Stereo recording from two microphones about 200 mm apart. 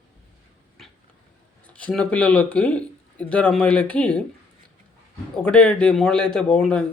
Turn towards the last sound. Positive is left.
turn(degrees=5)  # may be behind; listen again after turning